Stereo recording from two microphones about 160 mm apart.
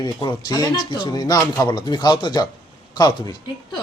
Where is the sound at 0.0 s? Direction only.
25° left (ahead or behind).